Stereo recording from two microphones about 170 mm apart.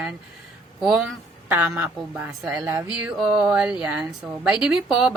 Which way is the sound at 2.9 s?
5° right (ahead or behind).